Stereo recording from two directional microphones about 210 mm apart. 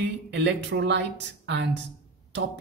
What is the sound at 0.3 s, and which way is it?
Speech, 55° right (ahead or behind).